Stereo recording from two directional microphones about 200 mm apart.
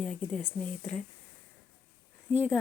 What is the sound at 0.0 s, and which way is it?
Speech, centre (ahead or behind).